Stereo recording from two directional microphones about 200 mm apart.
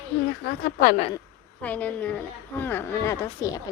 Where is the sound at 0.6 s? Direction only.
45° left (ahead or behind).